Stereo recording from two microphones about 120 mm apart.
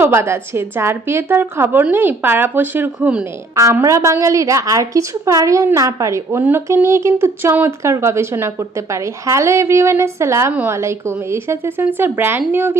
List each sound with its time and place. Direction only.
0.0 s a woman's voice: 20° right (ahead or behind)
3.5 s a woman's voice: 25° right (ahead or behind)
10.5 s speech: 10° right (ahead or behind)
10.8 s a woman's voice: 20° right (ahead or behind)